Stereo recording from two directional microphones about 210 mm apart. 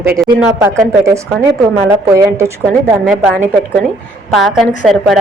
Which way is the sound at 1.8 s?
15° right (ahead or behind).